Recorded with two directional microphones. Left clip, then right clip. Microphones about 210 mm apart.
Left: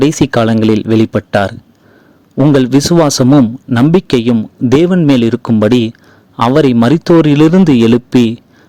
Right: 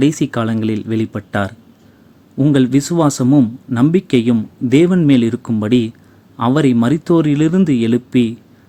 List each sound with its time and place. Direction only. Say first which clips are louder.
0.0 s speech: left 6 dB; 40° left (ahead or behind)